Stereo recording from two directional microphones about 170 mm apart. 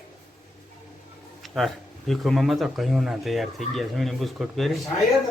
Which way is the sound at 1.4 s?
Centre (ahead or behind).